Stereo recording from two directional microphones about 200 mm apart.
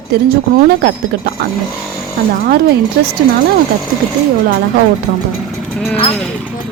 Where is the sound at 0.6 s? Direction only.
55° right (ahead or behind).